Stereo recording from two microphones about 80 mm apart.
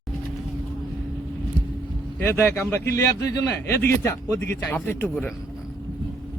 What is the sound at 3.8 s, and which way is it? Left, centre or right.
Speech, left.